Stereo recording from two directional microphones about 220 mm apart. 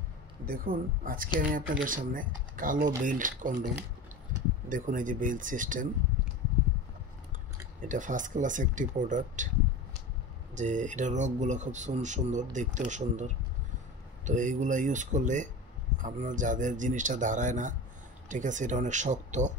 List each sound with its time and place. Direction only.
0.5 s speech: 40° right (ahead or behind)
4.6 s speech: 35° right (ahead or behind)
7.8 s speech: 35° right (ahead or behind)
10.5 s speech: 35° right (ahead or behind)